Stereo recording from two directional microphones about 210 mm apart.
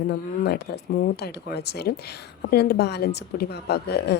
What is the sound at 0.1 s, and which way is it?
Speech, 50° left (ahead or behind).